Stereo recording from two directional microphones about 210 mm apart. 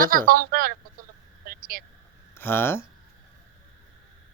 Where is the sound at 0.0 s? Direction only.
40° right (ahead or behind).